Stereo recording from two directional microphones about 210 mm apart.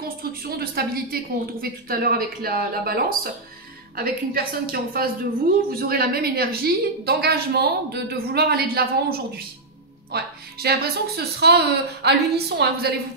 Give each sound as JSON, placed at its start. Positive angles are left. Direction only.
{"t": 0.0, "sound": "a woman's voice", "side_deg": -45}